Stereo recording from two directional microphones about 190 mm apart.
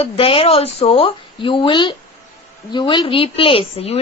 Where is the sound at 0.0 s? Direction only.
30° left (ahead or behind).